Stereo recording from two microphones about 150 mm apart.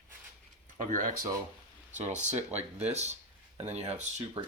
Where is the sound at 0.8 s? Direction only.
60° right (ahead or behind).